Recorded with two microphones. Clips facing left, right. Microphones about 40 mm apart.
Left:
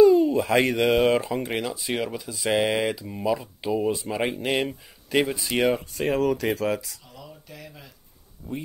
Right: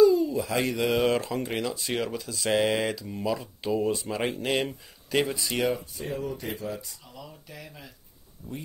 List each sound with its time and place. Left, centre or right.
0.0 s a sound: left
0.9 s speech: centre
5.9 s speech: left
7.2 s speech: centre